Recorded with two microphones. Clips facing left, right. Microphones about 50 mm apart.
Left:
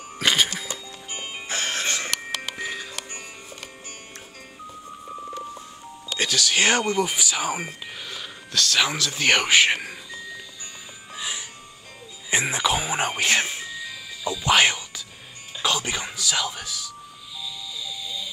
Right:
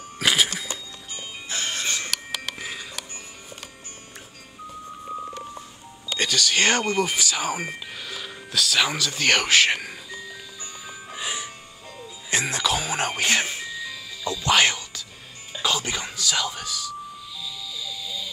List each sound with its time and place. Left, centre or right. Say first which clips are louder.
0.2 s music: even; centre
1.3 s music: left 2 dB; left
1.7 s a sound: left 1 dB; left
2.5 s music: left 3 dB; centre
6.1 s speech: even; centre
11.1 s music: right 1 dB; right
12.3 s music: left 1 dB; centre
15.5 s doorbell: even; centre
17.8 s vehicle: even; centre